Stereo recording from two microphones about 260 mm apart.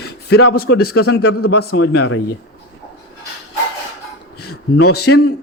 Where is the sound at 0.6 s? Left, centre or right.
Left.